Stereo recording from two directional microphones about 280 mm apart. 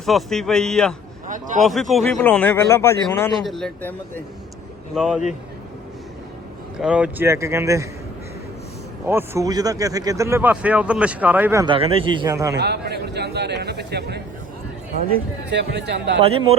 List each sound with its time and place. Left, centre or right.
0.0 s speech: centre
1.3 s speech: right
1.6 s speech: centre
6.7 s speech: centre
9.0 s speech: centre
12.5 s a man's voice: right
15.4 s a man's voice: right
16.2 s speech: centre